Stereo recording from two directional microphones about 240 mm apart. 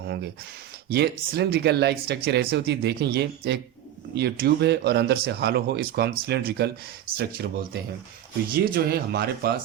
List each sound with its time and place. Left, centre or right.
0.9 s speech: right